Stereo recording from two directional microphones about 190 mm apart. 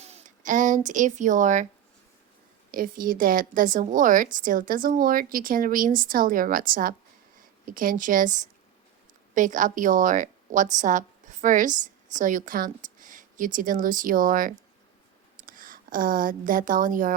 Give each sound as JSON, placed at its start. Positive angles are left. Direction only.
{"t": 0.0, "sound": "speech", "side_deg": -40}
{"t": 2.7, "sound": "a woman's voice", "side_deg": -45}